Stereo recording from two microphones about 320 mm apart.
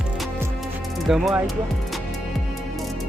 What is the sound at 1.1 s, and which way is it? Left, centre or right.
Speech, centre.